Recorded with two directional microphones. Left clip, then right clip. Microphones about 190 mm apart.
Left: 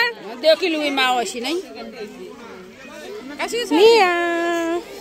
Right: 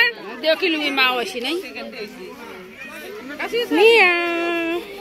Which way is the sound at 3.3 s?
25° left (ahead or behind).